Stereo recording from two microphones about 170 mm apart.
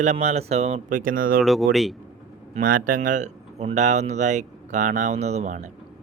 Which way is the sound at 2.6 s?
55° right (ahead or behind).